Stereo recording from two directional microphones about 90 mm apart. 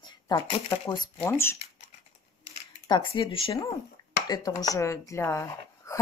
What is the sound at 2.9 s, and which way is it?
Speech, 65° left (ahead or behind).